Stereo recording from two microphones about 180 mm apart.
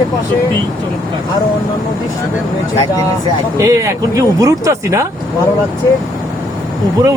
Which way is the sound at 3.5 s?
15° right (ahead or behind).